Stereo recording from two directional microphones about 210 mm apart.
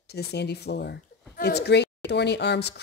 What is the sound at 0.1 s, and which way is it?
Speech, 50° left (ahead or behind).